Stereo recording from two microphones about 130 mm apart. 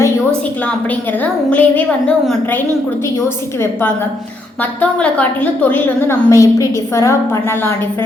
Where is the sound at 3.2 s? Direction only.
20° left (ahead or behind).